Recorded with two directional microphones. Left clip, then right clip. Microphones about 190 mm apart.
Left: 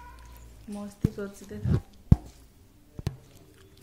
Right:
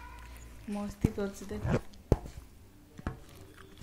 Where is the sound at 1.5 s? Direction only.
20° right (ahead or behind).